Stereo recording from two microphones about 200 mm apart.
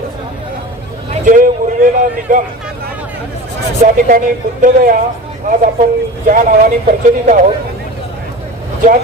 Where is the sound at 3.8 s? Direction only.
40° right (ahead or behind).